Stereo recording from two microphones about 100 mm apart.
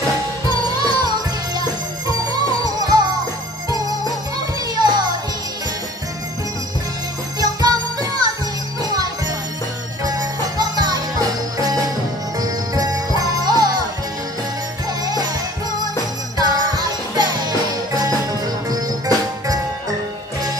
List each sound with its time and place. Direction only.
0.7 s music: 45° right (ahead or behind)
4.7 s music: 45° right (ahead or behind)
7.3 s music: 40° right (ahead or behind)
10.0 s music: 40° right (ahead or behind)
15.0 s music: 40° right (ahead or behind)
16.3 s music: 40° right (ahead or behind)